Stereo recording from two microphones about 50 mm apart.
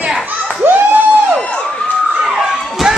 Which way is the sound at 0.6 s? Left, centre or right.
Right.